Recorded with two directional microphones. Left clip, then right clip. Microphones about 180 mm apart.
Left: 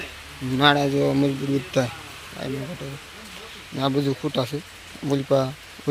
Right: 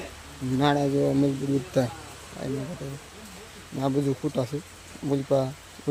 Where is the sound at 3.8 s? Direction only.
5° right (ahead or behind).